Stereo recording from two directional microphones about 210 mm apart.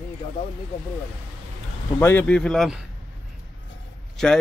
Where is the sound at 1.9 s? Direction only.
10° left (ahead or behind).